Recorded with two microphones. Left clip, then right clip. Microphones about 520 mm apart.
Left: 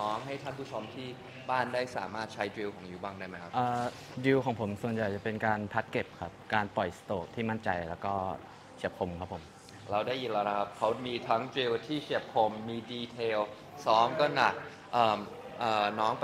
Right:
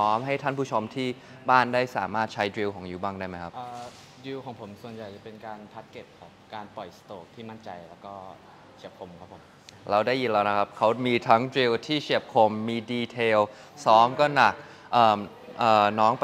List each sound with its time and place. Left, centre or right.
0.0 s a man's voice: right
0.7 s a man's voice: right
3.5 s speech: left
5.4 s speech: left
6.5 s speech: left
8.8 s speech: left
9.8 s a man's voice: right